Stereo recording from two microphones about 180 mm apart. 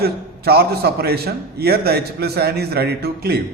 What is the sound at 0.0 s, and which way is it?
A man's voice, 60° right (ahead or behind).